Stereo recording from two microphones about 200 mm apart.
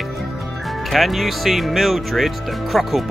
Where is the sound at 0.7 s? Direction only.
Centre (ahead or behind).